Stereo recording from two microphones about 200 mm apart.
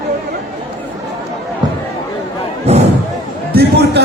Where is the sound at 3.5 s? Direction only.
55° right (ahead or behind).